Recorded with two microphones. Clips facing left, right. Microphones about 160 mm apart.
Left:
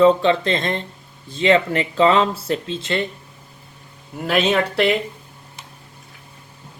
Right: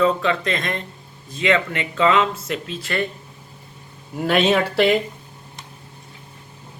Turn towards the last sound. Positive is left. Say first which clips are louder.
# right 1 dB
turn(degrees=0)  # may be behind; listen again after turning